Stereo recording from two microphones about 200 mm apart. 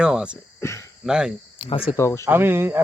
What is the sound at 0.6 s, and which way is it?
Speech, 15° left (ahead or behind).